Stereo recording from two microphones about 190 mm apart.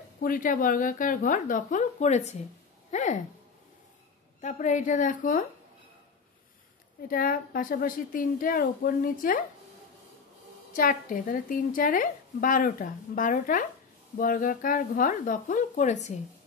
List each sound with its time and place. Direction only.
0.2 s a woman's voice: 45° left (ahead or behind)
4.4 s a woman's voice: 40° left (ahead or behind)
7.1 s a woman's voice: 50° left (ahead or behind)
10.8 s a woman's voice: 45° left (ahead or behind)